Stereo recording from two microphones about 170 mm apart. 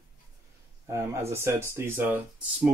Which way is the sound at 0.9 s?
15° right (ahead or behind).